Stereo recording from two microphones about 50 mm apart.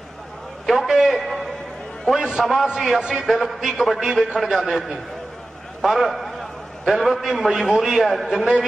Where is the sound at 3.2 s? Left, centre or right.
Centre.